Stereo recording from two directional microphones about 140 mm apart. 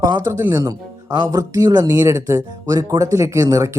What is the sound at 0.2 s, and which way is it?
Speech, 15° right (ahead or behind).